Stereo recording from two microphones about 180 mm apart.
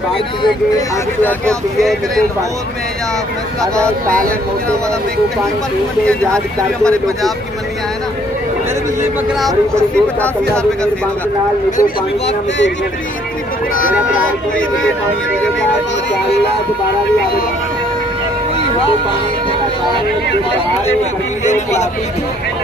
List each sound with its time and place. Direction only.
1.2 s speech: centre (ahead or behind)
3.7 s speech: 5° left (ahead or behind)
6.0 s speech: 5° left (ahead or behind)
9.4 s speech: 5° left (ahead or behind)
13.7 s speech: 50° left (ahead or behind)